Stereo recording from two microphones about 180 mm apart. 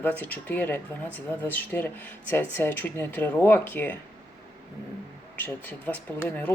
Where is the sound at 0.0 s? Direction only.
10° left (ahead or behind).